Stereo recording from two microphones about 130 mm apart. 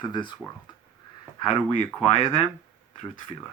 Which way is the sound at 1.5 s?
45° left (ahead or behind).